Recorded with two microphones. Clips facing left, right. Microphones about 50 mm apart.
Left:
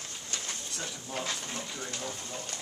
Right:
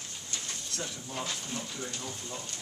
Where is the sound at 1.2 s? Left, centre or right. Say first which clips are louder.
Left 1 dB; left.